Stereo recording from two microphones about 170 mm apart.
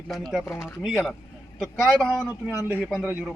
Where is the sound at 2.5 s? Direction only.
10° right (ahead or behind).